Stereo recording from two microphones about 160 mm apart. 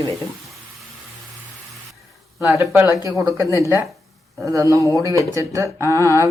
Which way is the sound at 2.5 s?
20° right (ahead or behind).